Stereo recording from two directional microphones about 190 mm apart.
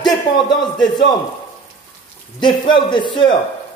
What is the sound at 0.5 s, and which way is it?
Speech, 25° left (ahead or behind).